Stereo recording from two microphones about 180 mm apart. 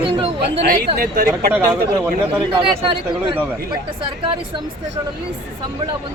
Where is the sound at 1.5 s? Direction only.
10° right (ahead or behind).